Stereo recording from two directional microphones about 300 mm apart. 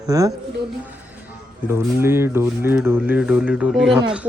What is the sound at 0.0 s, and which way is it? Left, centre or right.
Speech, centre.